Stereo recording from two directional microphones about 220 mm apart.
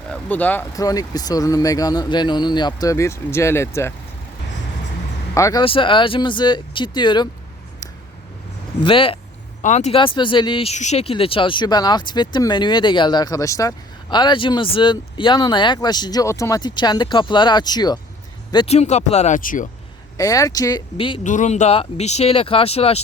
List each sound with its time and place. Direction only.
0.1 s speech: 5° left (ahead or behind)
5.3 s speech: 15° left (ahead or behind)
8.8 s speech: 25° left (ahead or behind)
20.1 s speech: 15° left (ahead or behind)
21.2 s speech: 35° left (ahead or behind)